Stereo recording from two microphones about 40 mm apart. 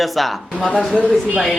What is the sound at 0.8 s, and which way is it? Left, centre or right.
Speech, left.